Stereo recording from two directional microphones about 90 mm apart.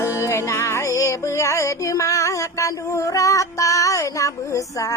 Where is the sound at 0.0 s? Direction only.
30° left (ahead or behind).